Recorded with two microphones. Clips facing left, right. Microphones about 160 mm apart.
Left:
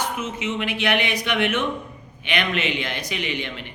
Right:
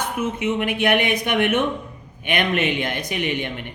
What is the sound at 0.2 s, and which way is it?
A man's voice, 55° right (ahead or behind).